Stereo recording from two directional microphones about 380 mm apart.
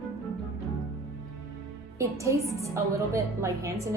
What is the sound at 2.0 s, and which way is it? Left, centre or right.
A woman's voice, centre.